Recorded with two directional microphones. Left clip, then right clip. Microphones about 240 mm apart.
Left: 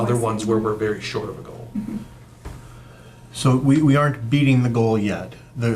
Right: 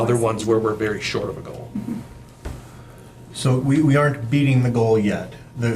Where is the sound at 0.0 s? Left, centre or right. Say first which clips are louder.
Right 2 dB; left.